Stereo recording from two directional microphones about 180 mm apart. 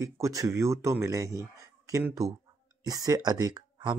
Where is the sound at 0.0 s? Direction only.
15° right (ahead or behind).